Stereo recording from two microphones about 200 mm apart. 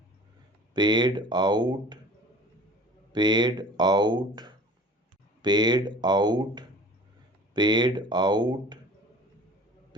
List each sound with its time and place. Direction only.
0.7 s speech: 20° right (ahead or behind)
3.1 s speech: 20° right (ahead or behind)